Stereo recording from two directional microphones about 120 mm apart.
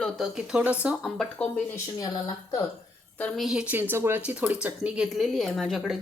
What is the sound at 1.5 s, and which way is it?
Speech, 25° left (ahead or behind).